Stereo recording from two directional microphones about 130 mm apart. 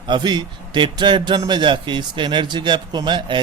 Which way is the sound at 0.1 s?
35° right (ahead or behind).